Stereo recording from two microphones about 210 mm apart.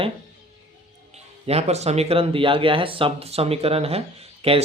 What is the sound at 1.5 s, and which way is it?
Speech, 30° right (ahead or behind).